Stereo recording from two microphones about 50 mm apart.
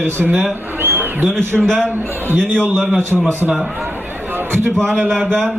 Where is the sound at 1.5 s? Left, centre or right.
Centre.